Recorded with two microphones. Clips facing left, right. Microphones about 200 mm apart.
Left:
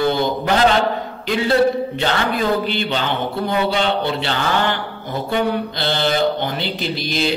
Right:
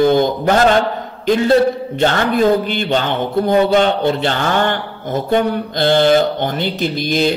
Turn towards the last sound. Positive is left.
turn(degrees=-45)  # may be behind; listen again after turning